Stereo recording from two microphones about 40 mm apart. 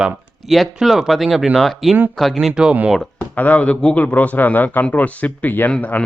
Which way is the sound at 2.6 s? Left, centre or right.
Centre.